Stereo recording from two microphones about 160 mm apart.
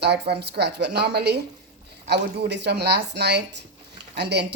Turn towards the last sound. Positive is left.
turn(degrees=-90)